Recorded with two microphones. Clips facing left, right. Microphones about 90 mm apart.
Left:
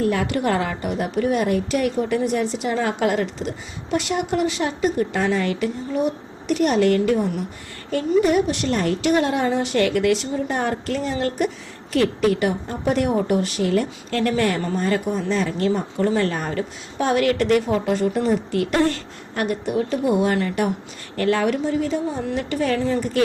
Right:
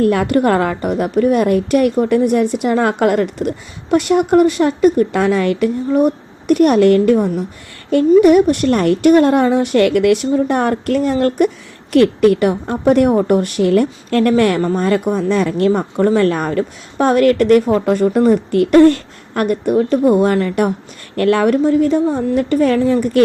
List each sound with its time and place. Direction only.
0.0 s a woman's voice: 60° right (ahead or behind)
7.9 s a woman's voice: 60° right (ahead or behind)
21.2 s a woman's voice: 55° right (ahead or behind)